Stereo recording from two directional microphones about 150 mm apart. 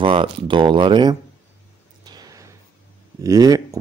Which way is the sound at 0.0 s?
35° right (ahead or behind).